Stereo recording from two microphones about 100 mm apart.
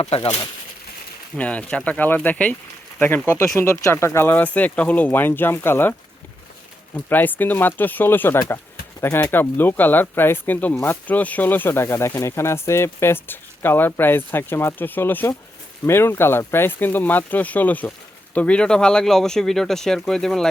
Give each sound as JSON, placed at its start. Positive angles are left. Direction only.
{"t": 0.0, "sound": "speech", "side_deg": 85}
{"t": 1.4, "sound": "speech", "side_deg": 15}
{"t": 3.2, "sound": "speech", "side_deg": 30}
{"t": 6.9, "sound": "speech", "side_deg": 20}